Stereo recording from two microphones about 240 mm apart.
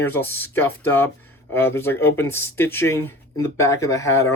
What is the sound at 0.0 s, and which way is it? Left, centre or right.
Speech, centre.